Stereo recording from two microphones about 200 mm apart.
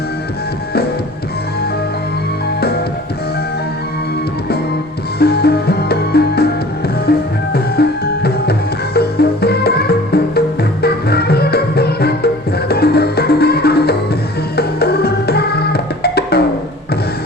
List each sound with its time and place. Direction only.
5.2 s music: 50° left (ahead or behind)